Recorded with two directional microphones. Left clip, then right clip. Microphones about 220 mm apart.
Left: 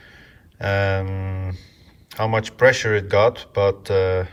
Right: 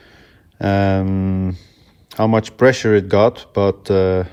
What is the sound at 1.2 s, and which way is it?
Speech, 90° right.